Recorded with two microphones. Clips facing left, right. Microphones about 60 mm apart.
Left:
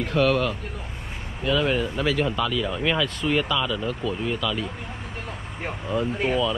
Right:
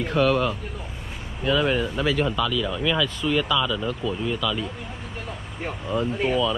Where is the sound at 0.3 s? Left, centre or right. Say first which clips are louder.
Right 1 dB; right.